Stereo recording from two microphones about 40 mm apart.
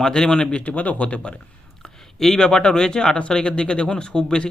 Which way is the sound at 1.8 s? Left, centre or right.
Centre.